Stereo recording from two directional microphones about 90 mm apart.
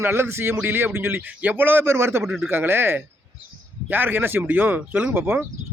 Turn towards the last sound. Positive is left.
turn(degrees=-25)  # may be behind; listen again after turning